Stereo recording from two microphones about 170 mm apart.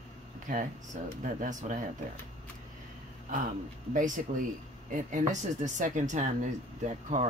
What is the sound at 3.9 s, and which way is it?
Speech, 50° right (ahead or behind).